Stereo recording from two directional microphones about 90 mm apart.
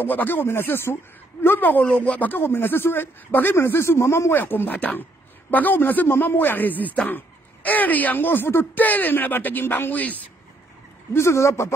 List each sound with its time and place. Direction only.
0.0 s a man's voice: 20° left (ahead or behind)
11.1 s speech: 30° left (ahead or behind)